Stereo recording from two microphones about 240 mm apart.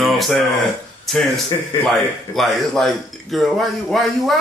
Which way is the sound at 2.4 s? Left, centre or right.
Centre.